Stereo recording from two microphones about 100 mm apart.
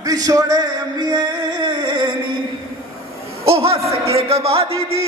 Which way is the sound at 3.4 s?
80° right.